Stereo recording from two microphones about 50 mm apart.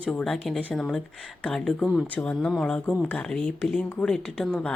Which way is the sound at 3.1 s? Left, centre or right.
Centre.